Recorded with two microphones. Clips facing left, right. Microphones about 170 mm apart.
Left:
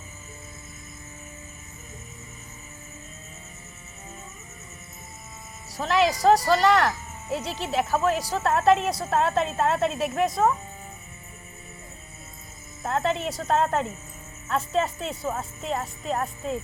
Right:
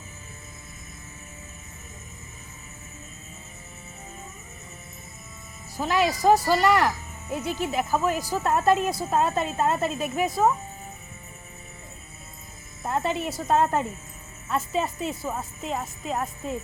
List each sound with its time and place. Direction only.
5.7 s speech: 5° right (ahead or behind)
12.8 s speech: 5° right (ahead or behind)